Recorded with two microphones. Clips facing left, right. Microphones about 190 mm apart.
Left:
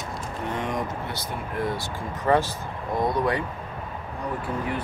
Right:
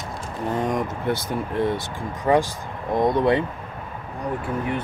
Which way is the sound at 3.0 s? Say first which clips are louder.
Right 5 dB; 25° right (ahead or behind).